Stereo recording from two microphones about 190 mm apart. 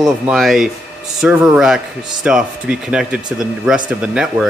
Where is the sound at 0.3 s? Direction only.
Centre (ahead or behind).